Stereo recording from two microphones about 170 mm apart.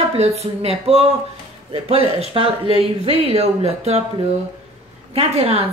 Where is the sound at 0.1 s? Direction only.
35° right (ahead or behind).